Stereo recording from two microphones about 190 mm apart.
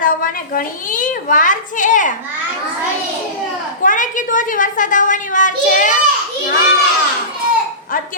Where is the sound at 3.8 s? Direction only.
45° left (ahead or behind).